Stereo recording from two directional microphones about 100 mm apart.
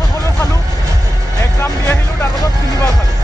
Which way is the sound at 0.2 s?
35° left (ahead or behind).